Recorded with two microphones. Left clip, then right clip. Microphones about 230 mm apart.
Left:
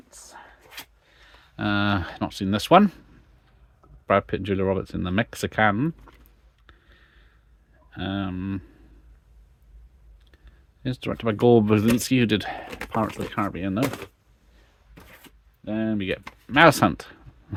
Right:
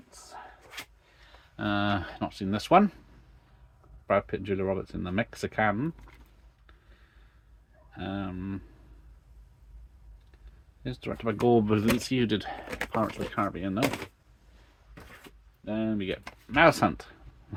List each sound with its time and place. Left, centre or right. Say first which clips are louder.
1.3 s speech: left 4 dB; left
4.0 s speech: left 5 dB; left
7.9 s speech: left 6 dB; left
10.8 s speech: left 6 dB; left
15.6 s speech: left 4 dB; left